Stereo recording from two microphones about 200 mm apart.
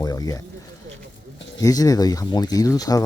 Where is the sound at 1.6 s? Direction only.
20° left (ahead or behind).